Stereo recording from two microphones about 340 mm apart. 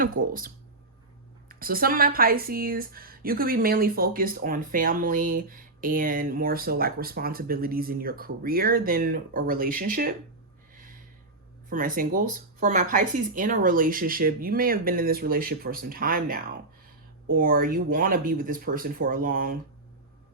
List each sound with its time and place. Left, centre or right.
0.0 s speech: right
11.7 s speech: right